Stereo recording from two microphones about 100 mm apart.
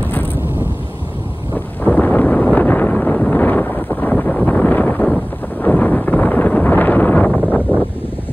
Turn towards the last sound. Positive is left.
turn(degrees=15)  # may be behind; listen again after turning